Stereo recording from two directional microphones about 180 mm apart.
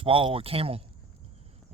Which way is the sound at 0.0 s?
30° right (ahead or behind).